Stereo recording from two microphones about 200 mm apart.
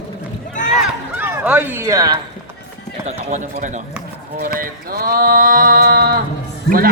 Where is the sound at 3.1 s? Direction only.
40° right (ahead or behind).